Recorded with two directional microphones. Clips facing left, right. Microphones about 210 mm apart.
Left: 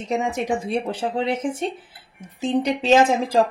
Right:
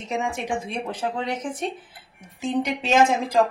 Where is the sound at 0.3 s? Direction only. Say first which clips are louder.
Left 5 dB; 35° left (ahead or behind).